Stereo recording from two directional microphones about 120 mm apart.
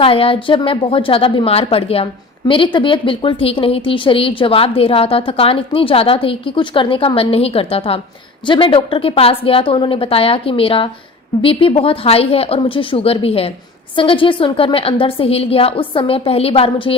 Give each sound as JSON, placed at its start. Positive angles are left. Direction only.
{"t": 0.0, "sound": "speech", "side_deg": 50}